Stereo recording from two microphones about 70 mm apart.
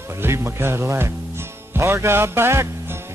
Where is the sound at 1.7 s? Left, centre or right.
Right.